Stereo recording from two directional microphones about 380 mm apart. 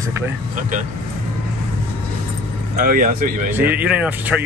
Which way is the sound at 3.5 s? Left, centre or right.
Centre.